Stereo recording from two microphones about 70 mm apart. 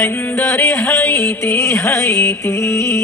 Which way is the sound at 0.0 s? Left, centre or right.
Left.